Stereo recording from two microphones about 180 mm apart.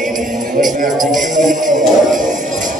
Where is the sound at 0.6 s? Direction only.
45° right (ahead or behind).